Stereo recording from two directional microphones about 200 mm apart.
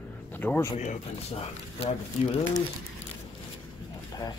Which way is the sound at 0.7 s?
35° left (ahead or behind).